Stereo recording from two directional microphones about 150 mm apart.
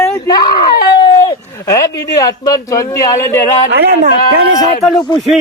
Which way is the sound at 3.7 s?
90° right.